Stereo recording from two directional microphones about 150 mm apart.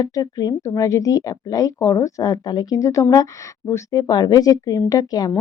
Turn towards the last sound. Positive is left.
turn(degrees=25)  # may be behind; listen again after turning